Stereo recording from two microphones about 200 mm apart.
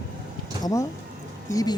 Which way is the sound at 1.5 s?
15° left (ahead or behind).